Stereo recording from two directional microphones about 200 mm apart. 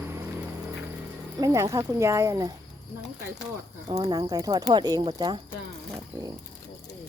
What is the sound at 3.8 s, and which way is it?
Speech, 15° right (ahead or behind).